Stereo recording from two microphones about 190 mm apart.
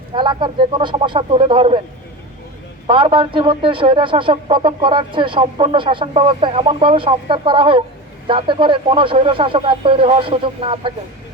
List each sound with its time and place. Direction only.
0.1 s a man's voice: 25° right (ahead or behind)
2.8 s a man's voice: 25° right (ahead or behind)